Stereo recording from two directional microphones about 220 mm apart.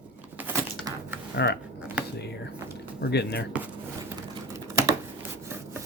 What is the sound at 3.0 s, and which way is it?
Speech, 50° left (ahead or behind).